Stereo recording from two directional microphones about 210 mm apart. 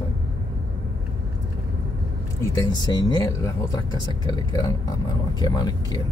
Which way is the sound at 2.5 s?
20° left (ahead or behind).